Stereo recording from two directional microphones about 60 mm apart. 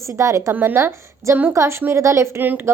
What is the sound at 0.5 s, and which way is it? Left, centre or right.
Speech, right.